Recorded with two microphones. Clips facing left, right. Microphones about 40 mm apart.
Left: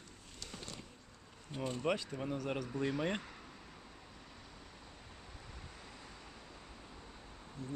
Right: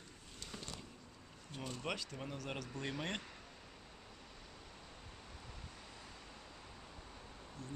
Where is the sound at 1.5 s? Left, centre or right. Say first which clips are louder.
Left 7 dB; centre.